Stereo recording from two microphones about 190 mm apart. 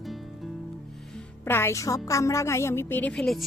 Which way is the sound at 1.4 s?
10° left (ahead or behind).